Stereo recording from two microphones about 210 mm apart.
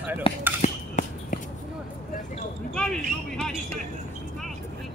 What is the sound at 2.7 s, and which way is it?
Speech, 5° left (ahead or behind).